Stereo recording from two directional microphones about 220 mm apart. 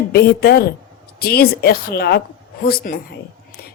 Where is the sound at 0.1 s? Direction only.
45° left (ahead or behind).